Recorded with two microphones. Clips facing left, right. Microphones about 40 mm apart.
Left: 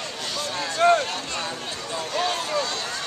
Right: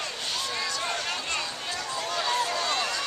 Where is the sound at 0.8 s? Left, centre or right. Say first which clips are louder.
Left 19 dB; left.